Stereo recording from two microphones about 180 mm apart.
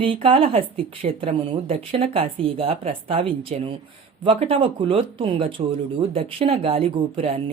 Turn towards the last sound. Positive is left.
turn(degrees=-30)  # may be behind; listen again after turning